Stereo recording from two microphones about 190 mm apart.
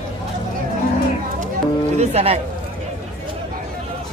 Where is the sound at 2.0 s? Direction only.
35° right (ahead or behind).